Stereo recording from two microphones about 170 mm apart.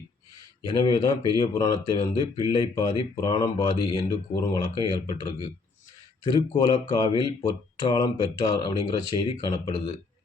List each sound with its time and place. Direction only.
0.6 s speech: 25° left (ahead or behind)